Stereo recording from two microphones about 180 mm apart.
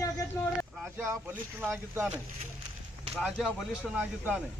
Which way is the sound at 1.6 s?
10° right (ahead or behind).